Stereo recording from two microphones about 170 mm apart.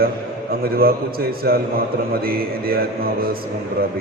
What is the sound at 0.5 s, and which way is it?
Speech, 60° right (ahead or behind).